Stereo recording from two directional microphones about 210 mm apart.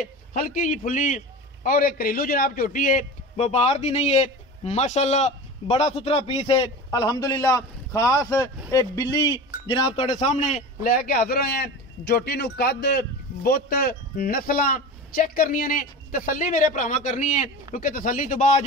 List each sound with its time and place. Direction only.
0.3 s a man's voice: 40° left (ahead or behind)